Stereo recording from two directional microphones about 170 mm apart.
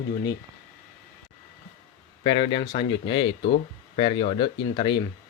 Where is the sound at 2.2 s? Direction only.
30° left (ahead or behind).